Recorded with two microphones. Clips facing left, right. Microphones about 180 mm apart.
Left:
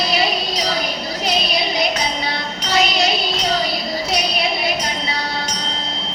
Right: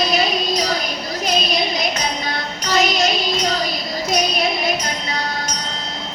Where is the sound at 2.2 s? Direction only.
45° right (ahead or behind).